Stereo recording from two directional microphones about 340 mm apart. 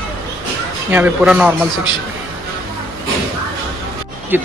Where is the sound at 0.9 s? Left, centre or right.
Centre.